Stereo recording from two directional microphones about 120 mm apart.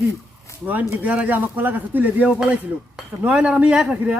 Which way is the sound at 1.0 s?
10° right (ahead or behind).